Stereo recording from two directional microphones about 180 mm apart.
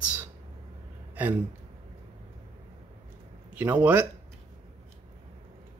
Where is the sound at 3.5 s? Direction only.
10° right (ahead or behind).